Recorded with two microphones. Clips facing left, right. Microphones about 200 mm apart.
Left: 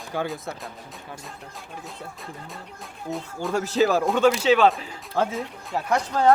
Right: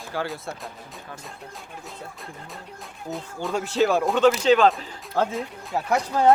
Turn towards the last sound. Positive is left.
turn(degrees=-5)  # may be behind; listen again after turning